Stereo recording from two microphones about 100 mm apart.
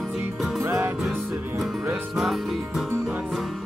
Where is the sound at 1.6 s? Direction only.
Centre (ahead or behind).